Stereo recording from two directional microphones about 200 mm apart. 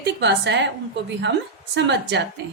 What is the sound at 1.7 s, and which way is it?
Speech, 60° right (ahead or behind).